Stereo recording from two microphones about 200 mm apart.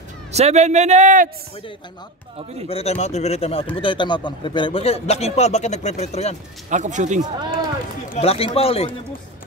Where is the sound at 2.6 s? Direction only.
30° left (ahead or behind).